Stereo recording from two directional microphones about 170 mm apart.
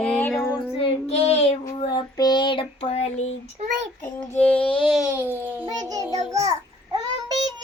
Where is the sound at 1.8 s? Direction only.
25° left (ahead or behind).